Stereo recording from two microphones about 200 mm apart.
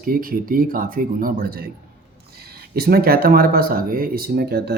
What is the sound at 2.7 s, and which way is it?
Speech, 50° right (ahead or behind).